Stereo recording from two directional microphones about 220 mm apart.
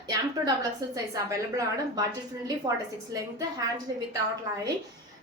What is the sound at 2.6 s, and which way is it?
A woman's voice, 20° right (ahead or behind).